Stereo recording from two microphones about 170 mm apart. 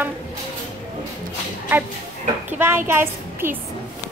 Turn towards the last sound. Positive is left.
turn(degrees=-15)  # may be behind; listen again after turning